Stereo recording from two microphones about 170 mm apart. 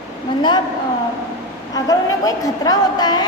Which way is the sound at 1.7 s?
20° left (ahead or behind).